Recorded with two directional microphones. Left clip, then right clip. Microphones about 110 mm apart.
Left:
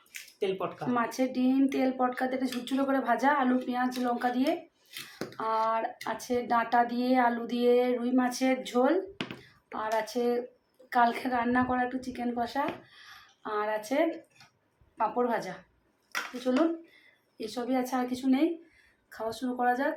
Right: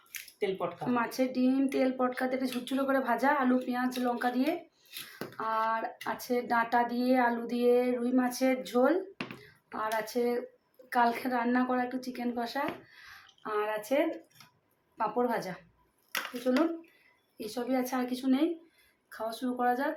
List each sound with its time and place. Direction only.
0.3 s speech: 20° left (ahead or behind)
0.9 s speech: 25° right (ahead or behind)
13.4 s speech: 40° right (ahead or behind)
15.2 s speech: 25° right (ahead or behind)
16.5 s speech: 45° right (ahead or behind)
17.4 s speech: 30° right (ahead or behind); by 19.9 s 10° right (ahead or behind)